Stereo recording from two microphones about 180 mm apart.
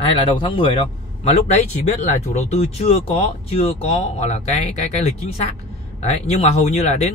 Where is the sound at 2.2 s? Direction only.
40° left (ahead or behind).